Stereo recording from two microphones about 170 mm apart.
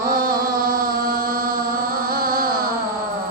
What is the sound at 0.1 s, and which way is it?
Chant, 60° right (ahead or behind).